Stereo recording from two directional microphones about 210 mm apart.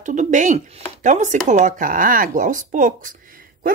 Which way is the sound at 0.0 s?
35° right (ahead or behind).